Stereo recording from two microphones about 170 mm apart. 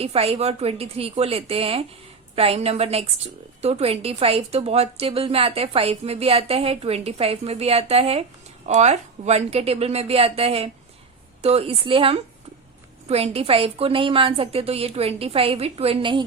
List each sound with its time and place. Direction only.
0.0 s a woman's voice: 35° right (ahead or behind)